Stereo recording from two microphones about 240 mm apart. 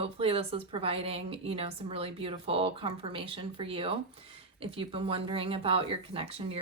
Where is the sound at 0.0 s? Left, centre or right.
Right.